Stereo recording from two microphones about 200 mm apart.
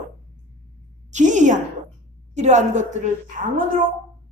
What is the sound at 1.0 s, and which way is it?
A woman's voice, 35° right (ahead or behind).